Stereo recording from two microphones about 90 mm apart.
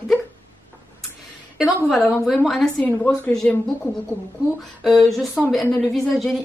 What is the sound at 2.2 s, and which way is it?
Speech, centre (ahead or behind).